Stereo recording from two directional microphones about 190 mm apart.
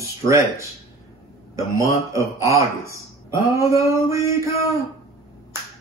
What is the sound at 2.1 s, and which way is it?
Speech, 15° right (ahead or behind).